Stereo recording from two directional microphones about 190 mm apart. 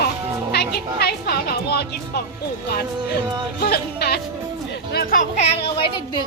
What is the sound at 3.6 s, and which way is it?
Speech, 55° left (ahead or behind).